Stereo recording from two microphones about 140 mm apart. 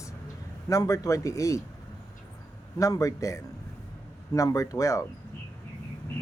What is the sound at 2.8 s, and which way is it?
Speech, 25° left (ahead or behind).